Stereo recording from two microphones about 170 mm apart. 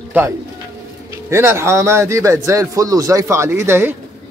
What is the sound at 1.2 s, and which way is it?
Speech, 15° right (ahead or behind).